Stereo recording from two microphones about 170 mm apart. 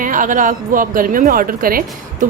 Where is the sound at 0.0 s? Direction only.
50° right (ahead or behind).